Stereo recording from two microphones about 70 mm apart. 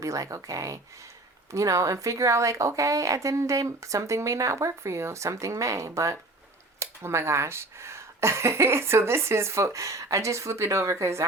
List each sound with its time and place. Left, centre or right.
0.0 s a woman's voice: right